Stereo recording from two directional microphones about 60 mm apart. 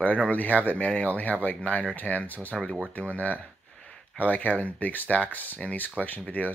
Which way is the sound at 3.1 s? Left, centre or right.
Left.